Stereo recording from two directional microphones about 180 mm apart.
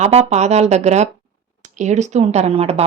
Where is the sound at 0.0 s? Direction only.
35° right (ahead or behind).